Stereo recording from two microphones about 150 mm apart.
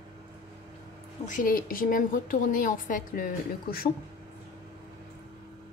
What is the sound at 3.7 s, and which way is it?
Speech, 90° left.